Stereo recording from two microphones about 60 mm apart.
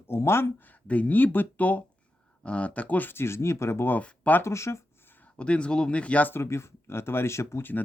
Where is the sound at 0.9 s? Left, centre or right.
Left.